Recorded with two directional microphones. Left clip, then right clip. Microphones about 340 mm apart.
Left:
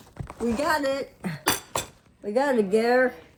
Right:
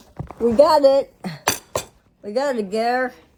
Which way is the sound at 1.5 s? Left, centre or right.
Right.